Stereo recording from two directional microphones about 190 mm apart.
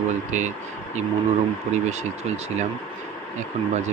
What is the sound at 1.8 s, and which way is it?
Speech, 35° right (ahead or behind).